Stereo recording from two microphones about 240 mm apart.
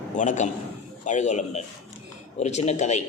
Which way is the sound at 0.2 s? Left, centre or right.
Left.